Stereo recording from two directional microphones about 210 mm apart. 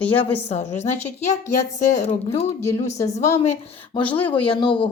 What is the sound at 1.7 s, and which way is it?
Speech, 35° left (ahead or behind).